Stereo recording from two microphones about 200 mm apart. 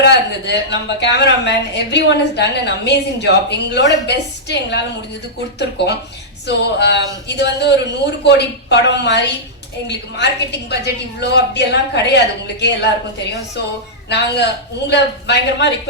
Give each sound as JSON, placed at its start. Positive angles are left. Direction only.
{"t": 0.0, "sound": "a woman's voice", "side_deg": 60}
{"t": 14.1, "sound": "a woman's voice", "side_deg": 60}